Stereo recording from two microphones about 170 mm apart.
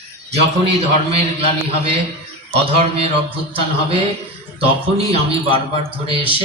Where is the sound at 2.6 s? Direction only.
35° right (ahead or behind).